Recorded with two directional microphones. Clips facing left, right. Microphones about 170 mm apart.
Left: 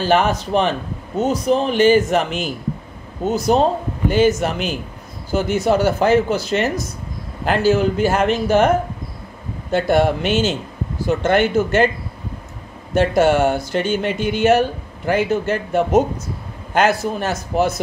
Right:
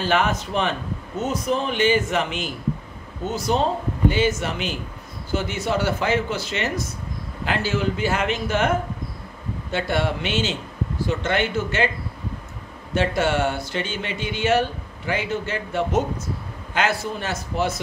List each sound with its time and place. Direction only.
0.0 s a man's voice: 35° left (ahead or behind)
12.9 s speech: 45° left (ahead or behind)